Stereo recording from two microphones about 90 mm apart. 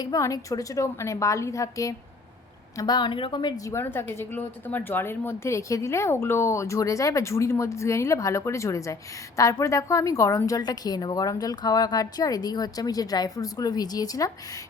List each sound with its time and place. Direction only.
0.0 s a woman's voice: 40° left (ahead or behind); by 3.5 s 65° left (ahead or behind)
3.7 s a woman's voice: 25° left (ahead or behind); by 14.3 s 45° left (ahead or behind)